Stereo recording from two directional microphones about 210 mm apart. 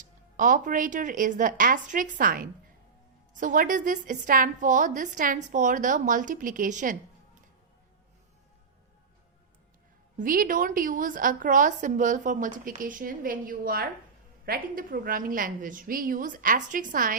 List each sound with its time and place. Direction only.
0.0 s a woman's voice: 40° right (ahead or behind)
10.2 s a woman's voice: 40° right (ahead or behind)